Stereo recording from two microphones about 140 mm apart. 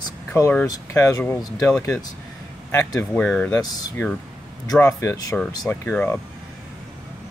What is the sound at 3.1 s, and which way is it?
Speech, 10° left (ahead or behind).